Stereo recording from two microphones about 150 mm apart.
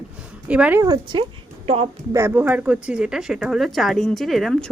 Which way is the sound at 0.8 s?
25° right (ahead or behind).